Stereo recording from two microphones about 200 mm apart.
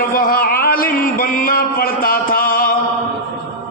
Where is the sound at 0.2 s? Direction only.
45° left (ahead or behind).